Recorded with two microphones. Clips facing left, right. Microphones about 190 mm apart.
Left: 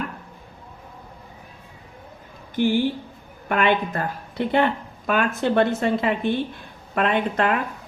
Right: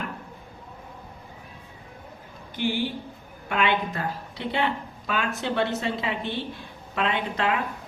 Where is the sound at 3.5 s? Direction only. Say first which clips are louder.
Left 4 dB; 50° left (ahead or behind).